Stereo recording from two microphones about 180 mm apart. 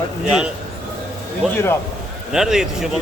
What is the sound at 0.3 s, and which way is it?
A man's voice, 5° right (ahead or behind).